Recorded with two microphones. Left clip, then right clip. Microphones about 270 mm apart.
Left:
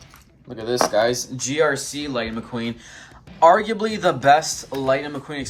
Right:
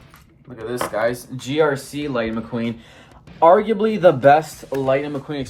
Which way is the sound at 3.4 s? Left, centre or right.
Left.